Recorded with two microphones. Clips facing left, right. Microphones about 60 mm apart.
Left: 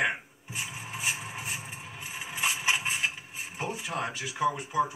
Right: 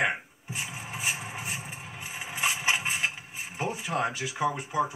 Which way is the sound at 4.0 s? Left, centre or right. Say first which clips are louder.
Right 3 dB; centre.